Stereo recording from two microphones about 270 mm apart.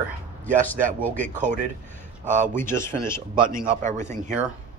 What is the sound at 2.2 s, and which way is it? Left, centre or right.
Speech, right.